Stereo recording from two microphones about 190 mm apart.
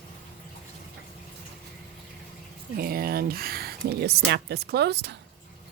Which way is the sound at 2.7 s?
50° right (ahead or behind).